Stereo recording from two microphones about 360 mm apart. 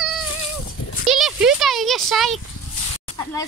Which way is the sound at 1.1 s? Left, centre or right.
Centre.